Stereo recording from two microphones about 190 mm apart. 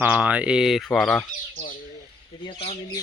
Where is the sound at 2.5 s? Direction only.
30° left (ahead or behind).